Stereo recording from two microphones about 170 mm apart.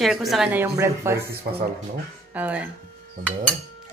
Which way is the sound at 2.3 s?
10° right (ahead or behind).